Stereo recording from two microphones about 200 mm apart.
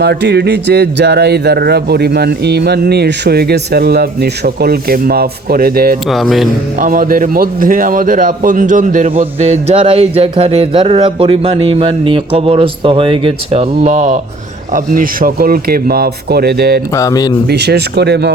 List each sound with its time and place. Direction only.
0.0 s speech: 55° right (ahead or behind)
6.1 s music: centre (ahead or behind)
6.7 s a man's voice: 40° right (ahead or behind)
14.9 s speech: 45° right (ahead or behind)
16.9 s speech: 15° left (ahead or behind)
17.4 s speech: 55° right (ahead or behind)